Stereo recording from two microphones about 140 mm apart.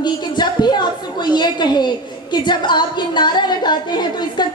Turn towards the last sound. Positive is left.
turn(degrees=30)  # may be behind; listen again after turning